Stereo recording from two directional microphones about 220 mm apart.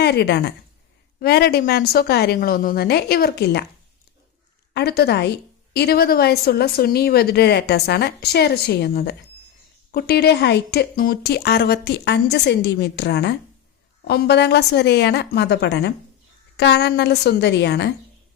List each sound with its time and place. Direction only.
0.0 s a woman's voice: 50° left (ahead or behind)
4.7 s a woman's voice: 45° left (ahead or behind)